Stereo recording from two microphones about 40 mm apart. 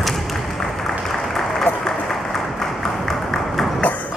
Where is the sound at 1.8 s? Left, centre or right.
Centre.